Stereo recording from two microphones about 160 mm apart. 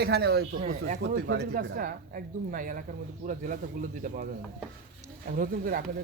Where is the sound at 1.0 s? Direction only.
90° right; by 4.2 s 50° right (ahead or behind).